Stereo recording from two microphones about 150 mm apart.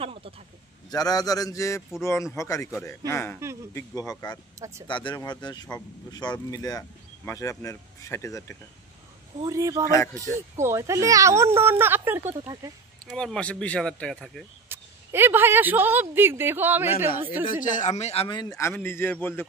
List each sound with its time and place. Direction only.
0.0 s a sound: 40° right (ahead or behind)
0.8 s a man's voice: 25° left (ahead or behind)
4.6 s speech: 20° right (ahead or behind)
4.8 s speech: 30° left (ahead or behind)
9.4 s speech: 25° right (ahead or behind)
13.1 s speech: 5° left (ahead or behind)
14.7 s speech: 15° right (ahead or behind)
17.5 s speech: 60° left (ahead or behind); by 18.7 s 25° left (ahead or behind)
18.7 s a man's voice: 15° left (ahead or behind)